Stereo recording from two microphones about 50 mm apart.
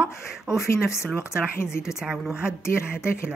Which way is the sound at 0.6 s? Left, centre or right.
Left.